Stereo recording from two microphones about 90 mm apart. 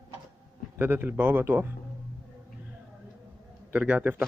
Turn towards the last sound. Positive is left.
turn(degrees=-20)  # may be behind; listen again after turning